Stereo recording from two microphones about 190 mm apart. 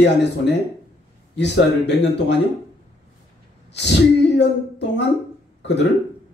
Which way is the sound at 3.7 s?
65° left (ahead or behind).